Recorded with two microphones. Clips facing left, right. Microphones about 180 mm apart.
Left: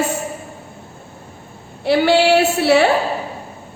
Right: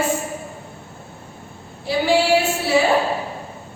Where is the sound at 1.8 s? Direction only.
70° left (ahead or behind).